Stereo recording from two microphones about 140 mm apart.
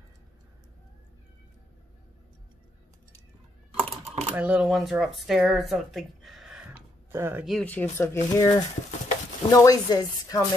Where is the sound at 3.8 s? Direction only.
50° right (ahead or behind).